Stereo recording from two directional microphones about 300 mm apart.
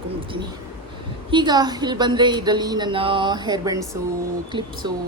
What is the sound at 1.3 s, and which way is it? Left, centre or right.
A woman's voice, centre.